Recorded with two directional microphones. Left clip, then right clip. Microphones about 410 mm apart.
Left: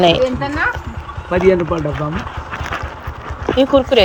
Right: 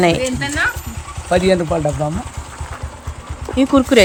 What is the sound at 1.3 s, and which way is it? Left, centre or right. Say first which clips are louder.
Speech: left 1 dB; centre.